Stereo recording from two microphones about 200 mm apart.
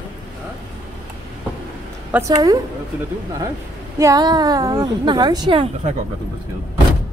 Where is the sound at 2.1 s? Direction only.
15° right (ahead or behind).